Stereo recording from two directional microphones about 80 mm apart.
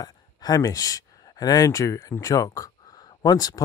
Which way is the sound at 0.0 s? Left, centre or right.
Left.